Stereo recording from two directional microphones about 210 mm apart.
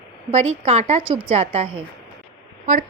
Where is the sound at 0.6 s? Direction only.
30° right (ahead or behind).